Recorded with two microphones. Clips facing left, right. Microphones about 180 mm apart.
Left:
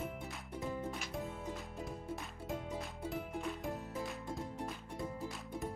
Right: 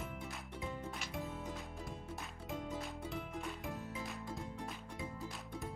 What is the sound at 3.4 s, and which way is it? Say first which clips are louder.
Music: left 3 dB; centre (ahead or behind).